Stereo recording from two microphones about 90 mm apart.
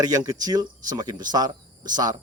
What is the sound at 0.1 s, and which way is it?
A man's voice, 40° right (ahead or behind).